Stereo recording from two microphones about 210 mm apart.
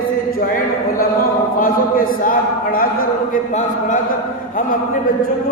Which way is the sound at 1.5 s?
40° left (ahead or behind).